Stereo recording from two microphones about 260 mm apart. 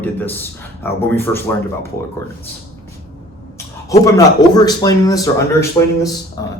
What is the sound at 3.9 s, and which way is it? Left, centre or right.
A man's voice, centre.